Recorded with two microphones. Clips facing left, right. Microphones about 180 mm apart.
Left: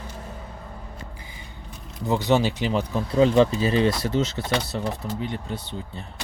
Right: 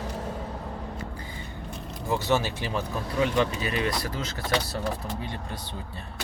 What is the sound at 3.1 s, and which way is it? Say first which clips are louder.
Speech: left 7 dB; 30° left (ahead or behind).